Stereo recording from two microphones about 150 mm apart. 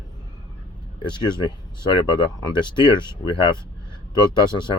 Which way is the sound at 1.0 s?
30° left (ahead or behind).